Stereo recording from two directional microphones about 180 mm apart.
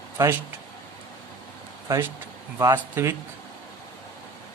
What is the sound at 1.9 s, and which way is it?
Speech, 15° right (ahead or behind).